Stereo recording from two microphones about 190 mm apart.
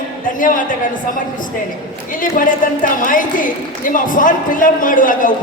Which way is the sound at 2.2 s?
45° left (ahead or behind).